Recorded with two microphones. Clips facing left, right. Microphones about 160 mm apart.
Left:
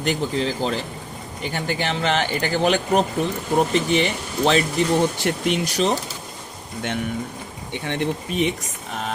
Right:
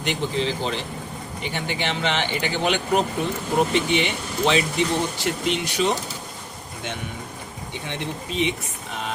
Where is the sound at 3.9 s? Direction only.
40° left (ahead or behind).